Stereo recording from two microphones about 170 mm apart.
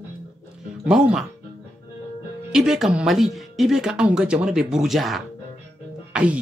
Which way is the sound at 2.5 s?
5° right (ahead or behind).